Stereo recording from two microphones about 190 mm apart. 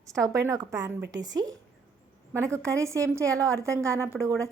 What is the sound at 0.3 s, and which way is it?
A woman's voice, 15° right (ahead or behind).